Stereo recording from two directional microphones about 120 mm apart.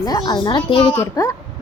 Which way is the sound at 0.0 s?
35° left (ahead or behind).